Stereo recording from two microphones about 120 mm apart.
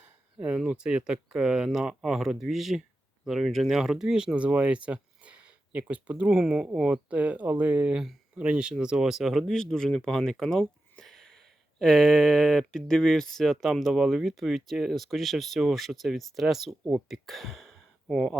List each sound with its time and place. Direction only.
0.3 s speech: 10° right (ahead or behind)